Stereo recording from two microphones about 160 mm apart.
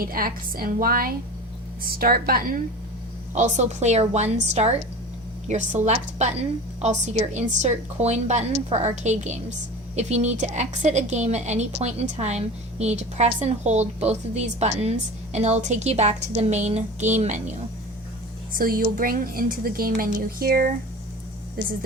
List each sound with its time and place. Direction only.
0.0 s a woman's voice: 65° right (ahead or behind)
3.3 s a woman's voice: 45° right (ahead or behind)
18.5 s a woman's voice: 60° right (ahead or behind)